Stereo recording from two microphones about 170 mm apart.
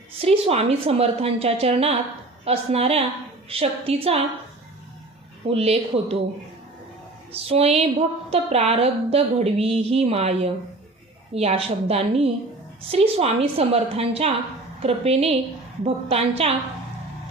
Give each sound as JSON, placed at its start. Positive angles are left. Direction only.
{"t": 0.2, "sound": "a woman's voice", "side_deg": -35}
{"t": 5.5, "sound": "a woman's voice", "side_deg": -35}
{"t": 7.4, "sound": "a woman's voice", "side_deg": -35}